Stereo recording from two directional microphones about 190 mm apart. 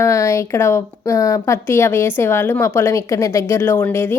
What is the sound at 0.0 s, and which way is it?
A woman's voice, 15° left (ahead or behind).